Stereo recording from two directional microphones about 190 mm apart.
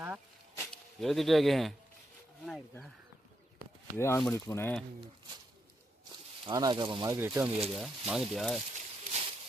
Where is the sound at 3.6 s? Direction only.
50° right (ahead or behind).